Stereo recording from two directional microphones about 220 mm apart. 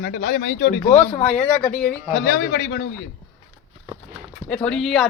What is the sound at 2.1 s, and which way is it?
Speech, 40° left (ahead or behind).